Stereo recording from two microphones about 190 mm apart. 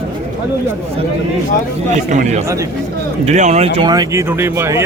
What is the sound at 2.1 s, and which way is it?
Speech, 40° right (ahead or behind).